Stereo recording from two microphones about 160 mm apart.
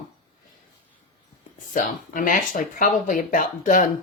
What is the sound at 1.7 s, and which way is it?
Speech, 55° left (ahead or behind).